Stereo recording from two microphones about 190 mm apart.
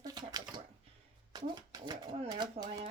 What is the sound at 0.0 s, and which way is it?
Typewriter, 20° right (ahead or behind).